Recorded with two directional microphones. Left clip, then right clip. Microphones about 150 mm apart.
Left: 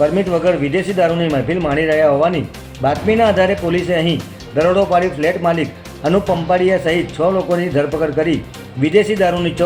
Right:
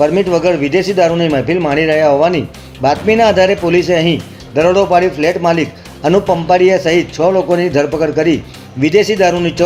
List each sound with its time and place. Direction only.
0.0 s speech: 45° right (ahead or behind)